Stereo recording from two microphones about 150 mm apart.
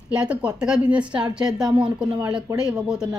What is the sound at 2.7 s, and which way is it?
Speech, 5° right (ahead or behind).